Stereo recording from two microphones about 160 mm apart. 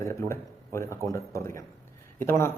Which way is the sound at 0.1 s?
15° left (ahead or behind).